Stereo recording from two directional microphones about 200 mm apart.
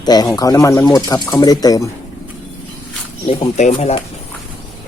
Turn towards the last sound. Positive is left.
turn(degrees=35)  # may be behind; listen again after turning